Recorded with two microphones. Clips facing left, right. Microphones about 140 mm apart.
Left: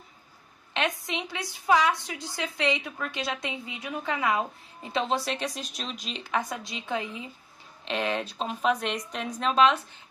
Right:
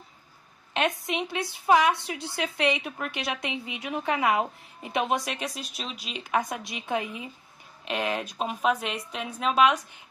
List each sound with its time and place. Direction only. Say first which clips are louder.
0.7 s a woman's voice: right 3 dB; 20° right (ahead or behind)